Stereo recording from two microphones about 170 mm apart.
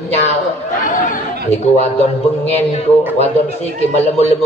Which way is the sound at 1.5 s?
40° left (ahead or behind).